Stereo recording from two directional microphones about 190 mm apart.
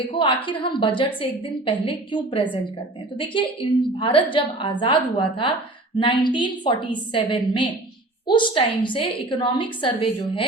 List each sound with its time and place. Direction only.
0.4 s a woman's voice: 25° left (ahead or behind)